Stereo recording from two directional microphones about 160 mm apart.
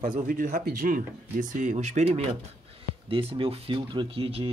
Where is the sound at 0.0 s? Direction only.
60° right (ahead or behind).